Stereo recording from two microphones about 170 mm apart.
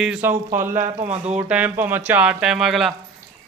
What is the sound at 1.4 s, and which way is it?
A man's voice, 10° right (ahead or behind).